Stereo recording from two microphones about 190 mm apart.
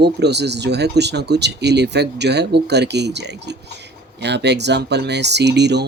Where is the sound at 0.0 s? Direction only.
60° right (ahead or behind).